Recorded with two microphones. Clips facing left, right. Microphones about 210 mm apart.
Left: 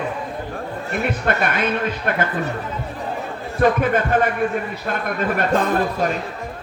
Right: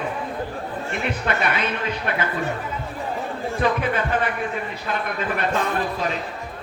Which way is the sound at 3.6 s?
45° left (ahead or behind).